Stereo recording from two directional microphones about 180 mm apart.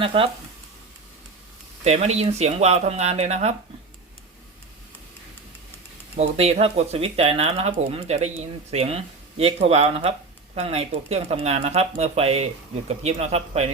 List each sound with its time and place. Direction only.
0.0 s speech: 30° right (ahead or behind)
1.8 s speech: 35° right (ahead or behind)
6.1 s speech: 35° right (ahead or behind)